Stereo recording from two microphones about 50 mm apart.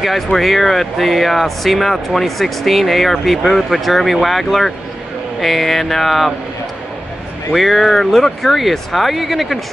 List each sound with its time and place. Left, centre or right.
0.0 s speech: centre
7.5 s speech: centre